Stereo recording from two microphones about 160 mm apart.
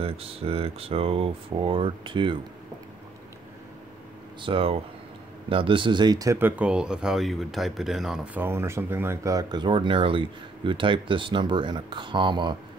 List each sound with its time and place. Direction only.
0.0 s speech: 35° right (ahead or behind)
4.4 s speech: 35° right (ahead or behind)